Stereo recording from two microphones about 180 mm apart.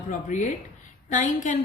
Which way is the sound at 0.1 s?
45° left (ahead or behind).